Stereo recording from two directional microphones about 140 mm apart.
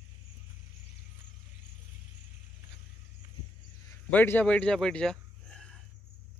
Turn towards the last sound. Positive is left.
turn(degrees=5)  # may be behind; listen again after turning